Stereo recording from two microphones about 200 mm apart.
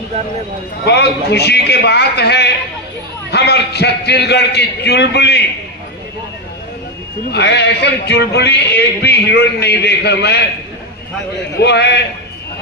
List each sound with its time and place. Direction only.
0.8 s a man's voice: 55° left (ahead or behind)
7.2 s a man's voice: 55° left (ahead or behind)
11.5 s a man's voice: 55° left (ahead or behind)